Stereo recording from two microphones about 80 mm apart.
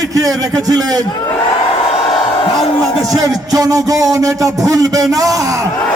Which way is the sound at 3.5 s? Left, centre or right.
Right.